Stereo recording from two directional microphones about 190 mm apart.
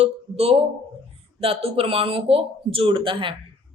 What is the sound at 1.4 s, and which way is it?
Speech, 30° right (ahead or behind).